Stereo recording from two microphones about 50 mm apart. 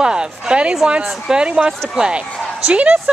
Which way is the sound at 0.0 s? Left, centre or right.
Centre.